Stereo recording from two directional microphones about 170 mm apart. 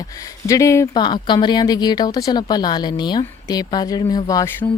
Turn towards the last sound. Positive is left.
turn(degrees=20)  # may be behind; listen again after turning